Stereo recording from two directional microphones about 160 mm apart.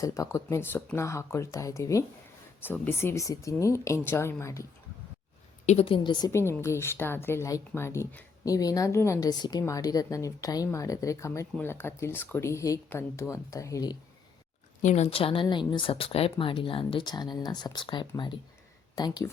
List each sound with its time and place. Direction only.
0.0 s a woman's voice: 20° left (ahead or behind)
5.6 s speech: 40° left (ahead or behind)
6.5 s a woman's voice: 15° left (ahead or behind)
14.8 s a woman's voice: 45° left (ahead or behind); by 19.3 s 25° left (ahead or behind)